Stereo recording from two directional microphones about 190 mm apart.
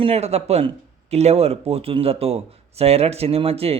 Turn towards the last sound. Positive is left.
turn(degrees=-30)  # may be behind; listen again after turning